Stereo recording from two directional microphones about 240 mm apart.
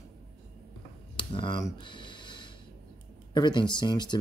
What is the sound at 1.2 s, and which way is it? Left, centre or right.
Speech, left.